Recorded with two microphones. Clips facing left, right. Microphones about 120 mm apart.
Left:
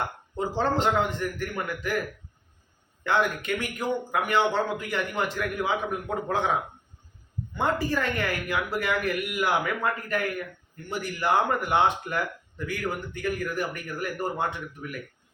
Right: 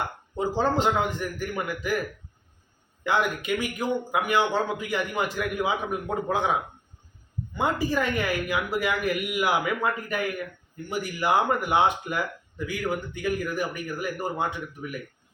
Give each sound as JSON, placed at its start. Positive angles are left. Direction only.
{"t": 0.3, "sound": "speech", "side_deg": -5}
{"t": 3.0, "sound": "speech", "side_deg": -5}
{"t": 7.5, "sound": "speech", "side_deg": -5}